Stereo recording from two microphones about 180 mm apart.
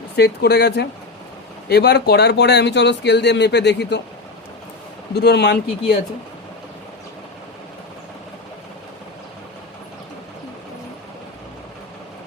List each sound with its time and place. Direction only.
0.2 s speech: 65° left (ahead or behind)
5.1 s speech: 65° left (ahead or behind)